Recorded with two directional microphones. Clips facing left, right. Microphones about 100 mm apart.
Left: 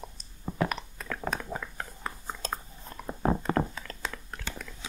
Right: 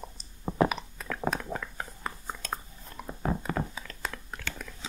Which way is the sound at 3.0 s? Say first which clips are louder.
Left 4 dB; 25° left (ahead or behind).